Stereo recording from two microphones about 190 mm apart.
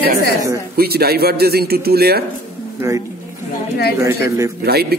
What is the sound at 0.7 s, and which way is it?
A man's voice, 55° right (ahead or behind).